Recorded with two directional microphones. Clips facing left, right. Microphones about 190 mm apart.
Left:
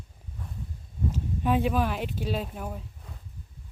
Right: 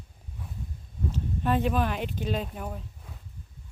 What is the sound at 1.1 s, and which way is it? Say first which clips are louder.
Speech: left 1 dB; 10° left (ahead or behind).